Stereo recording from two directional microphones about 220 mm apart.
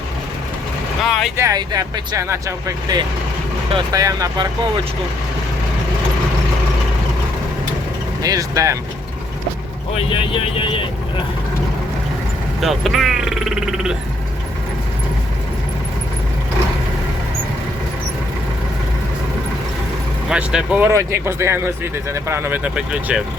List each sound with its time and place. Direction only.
1.0 s speech: centre (ahead or behind)
1.4 s speech: 15° right (ahead or behind)
8.2 s speech: 15° right (ahead or behind)
10.1 s speech: 25° left (ahead or behind)
12.5 s speech: centre (ahead or behind)
20.3 s speech: 5° right (ahead or behind)